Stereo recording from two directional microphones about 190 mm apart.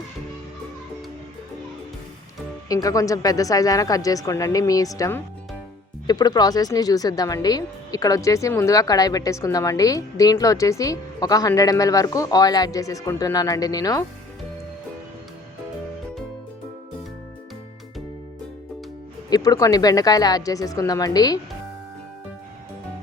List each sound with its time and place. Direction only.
2.6 s speech: 20° left (ahead or behind)
19.3 s speech: 20° left (ahead or behind)